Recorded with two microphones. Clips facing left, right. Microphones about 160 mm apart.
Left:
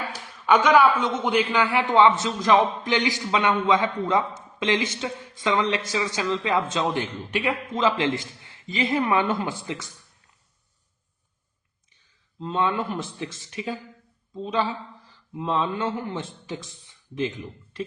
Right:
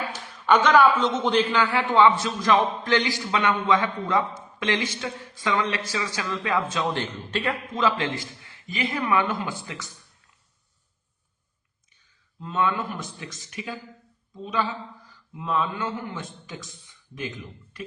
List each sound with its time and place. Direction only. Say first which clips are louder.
0.4 s a man's voice: even; 10° left (ahead or behind)
7.0 s a man's voice: left 1 dB; 10° left (ahead or behind)
12.4 s a man's voice: left 1 dB; 25° left (ahead or behind)